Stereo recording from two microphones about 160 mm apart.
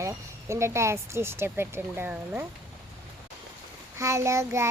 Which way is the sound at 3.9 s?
15° right (ahead or behind).